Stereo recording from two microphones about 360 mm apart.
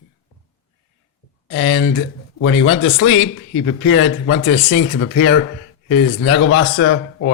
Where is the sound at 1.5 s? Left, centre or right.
Left.